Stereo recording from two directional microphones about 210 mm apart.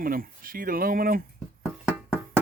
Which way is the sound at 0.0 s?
45° right (ahead or behind).